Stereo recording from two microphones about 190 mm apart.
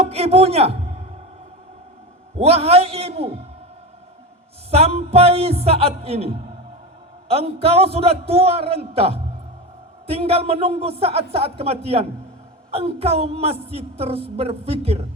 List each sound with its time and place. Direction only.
0.0 s a man's voice: 35° right (ahead or behind)
2.4 s speech: 30° right (ahead or behind)
4.7 s speech: 35° right (ahead or behind)